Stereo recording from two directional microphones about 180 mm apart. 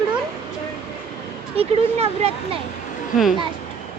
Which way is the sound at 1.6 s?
35° right (ahead or behind).